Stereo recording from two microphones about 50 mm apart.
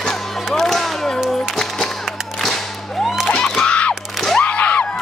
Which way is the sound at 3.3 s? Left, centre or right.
Centre.